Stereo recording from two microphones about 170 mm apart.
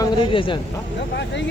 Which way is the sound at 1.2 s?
90° left.